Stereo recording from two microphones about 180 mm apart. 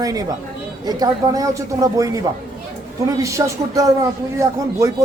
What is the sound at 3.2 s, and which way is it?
Speech, 15° right (ahead or behind).